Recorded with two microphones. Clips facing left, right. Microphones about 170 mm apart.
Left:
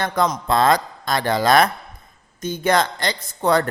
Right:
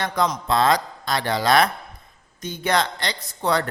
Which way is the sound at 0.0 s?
50° left (ahead or behind).